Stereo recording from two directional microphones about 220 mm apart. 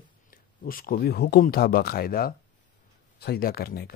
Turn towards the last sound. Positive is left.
turn(degrees=45)  # may be behind; listen again after turning